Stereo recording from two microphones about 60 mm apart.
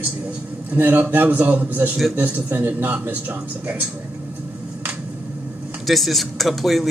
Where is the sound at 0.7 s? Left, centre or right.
Right.